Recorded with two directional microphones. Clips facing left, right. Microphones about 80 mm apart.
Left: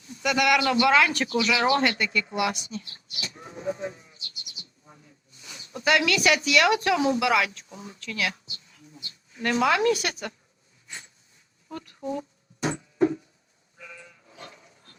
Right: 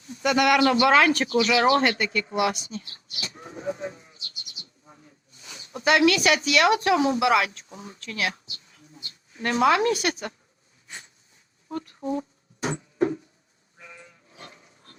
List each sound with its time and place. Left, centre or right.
0.1 s speech: right
5.7 s speech: right
9.4 s speech: right
12.7 s a sound: right